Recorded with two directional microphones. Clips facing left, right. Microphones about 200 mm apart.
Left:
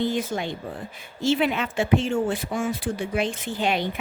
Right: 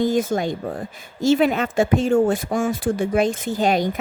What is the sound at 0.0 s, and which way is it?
Speech, 45° right (ahead or behind).